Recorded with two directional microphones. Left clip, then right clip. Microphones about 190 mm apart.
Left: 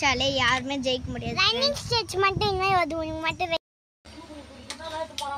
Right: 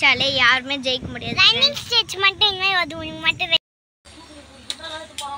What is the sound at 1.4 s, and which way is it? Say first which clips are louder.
A child's voice: right 8 dB; 60° left (ahead or behind).